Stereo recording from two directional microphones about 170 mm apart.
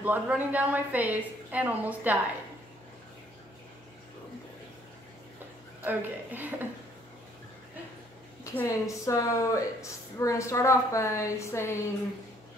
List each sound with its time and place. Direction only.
0.0 s a woman's voice: 10° right (ahead or behind)
5.9 s a woman's voice: 10° right (ahead or behind)
8.5 s a woman's voice: 20° left (ahead or behind)